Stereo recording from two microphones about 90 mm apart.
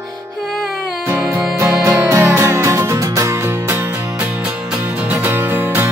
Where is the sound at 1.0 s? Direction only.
30° right (ahead or behind).